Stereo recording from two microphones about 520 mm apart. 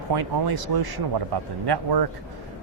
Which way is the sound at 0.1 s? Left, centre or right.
Right.